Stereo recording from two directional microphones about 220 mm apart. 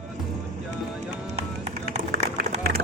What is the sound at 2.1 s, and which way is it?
Run, 40° right (ahead or behind).